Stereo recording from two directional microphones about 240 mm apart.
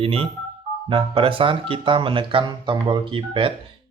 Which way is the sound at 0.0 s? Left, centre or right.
Right.